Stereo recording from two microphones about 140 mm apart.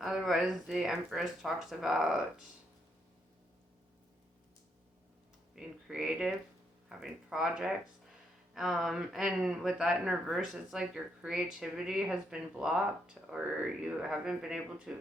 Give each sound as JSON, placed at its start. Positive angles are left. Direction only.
{"t": 0.0, "sound": "speech", "side_deg": 0}
{"t": 5.5, "sound": "speech", "side_deg": -5}